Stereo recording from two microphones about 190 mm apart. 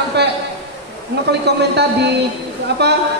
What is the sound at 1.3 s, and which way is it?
A man's voice, 60° right (ahead or behind).